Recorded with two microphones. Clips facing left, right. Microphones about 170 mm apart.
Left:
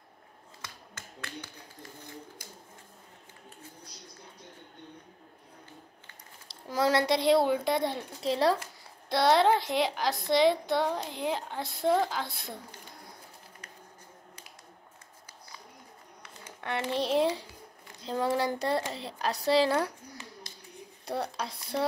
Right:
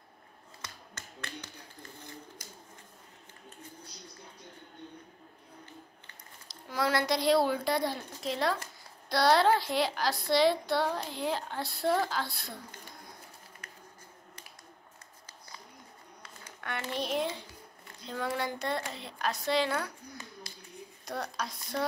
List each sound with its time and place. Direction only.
6.4 s speech: 30° left (ahead or behind)
16.9 s a child's voice: 30° left (ahead or behind)